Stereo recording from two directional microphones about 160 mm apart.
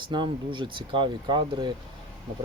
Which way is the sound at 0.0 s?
30° right (ahead or behind).